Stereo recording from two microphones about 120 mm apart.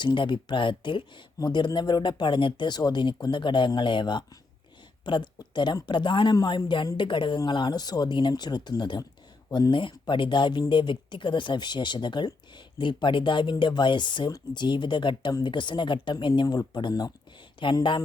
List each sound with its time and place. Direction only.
0.0 s speech: 40° left (ahead or behind)